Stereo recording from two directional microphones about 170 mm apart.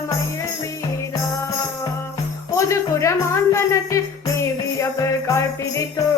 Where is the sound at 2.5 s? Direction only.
15° left (ahead or behind).